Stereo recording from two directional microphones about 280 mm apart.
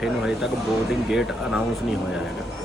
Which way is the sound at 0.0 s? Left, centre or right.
Centre.